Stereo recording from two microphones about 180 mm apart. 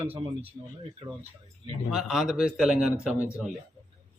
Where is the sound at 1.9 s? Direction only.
Centre (ahead or behind).